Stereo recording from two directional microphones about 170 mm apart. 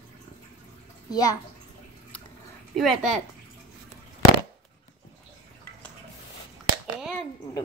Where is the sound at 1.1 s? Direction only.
20° left (ahead or behind).